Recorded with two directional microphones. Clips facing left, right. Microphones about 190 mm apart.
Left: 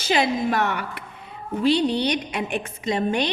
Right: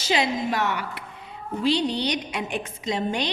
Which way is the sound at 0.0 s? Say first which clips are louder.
Left 3 dB; 55° left (ahead or behind).